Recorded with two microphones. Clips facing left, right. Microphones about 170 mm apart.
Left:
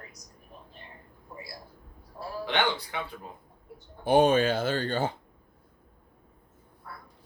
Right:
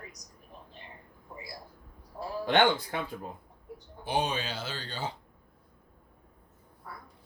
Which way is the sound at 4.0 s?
50° left (ahead or behind).